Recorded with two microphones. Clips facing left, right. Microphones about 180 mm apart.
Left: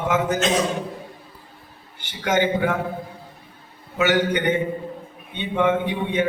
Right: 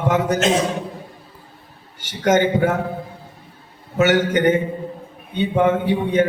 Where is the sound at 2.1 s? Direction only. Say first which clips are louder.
Right 4 dB; 45° right (ahead or behind).